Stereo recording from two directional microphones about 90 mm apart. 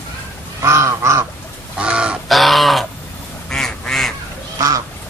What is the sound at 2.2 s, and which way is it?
Bird, centre (ahead or behind).